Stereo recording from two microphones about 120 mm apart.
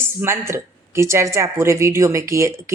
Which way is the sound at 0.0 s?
20° right (ahead or behind).